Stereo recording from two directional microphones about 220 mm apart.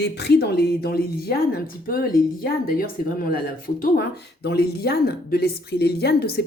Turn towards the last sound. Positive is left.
turn(degrees=45)  # may be behind; listen again after turning